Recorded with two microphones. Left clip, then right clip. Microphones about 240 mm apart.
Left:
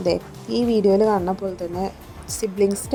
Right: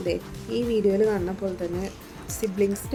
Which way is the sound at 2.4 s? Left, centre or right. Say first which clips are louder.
Left 4 dB; left.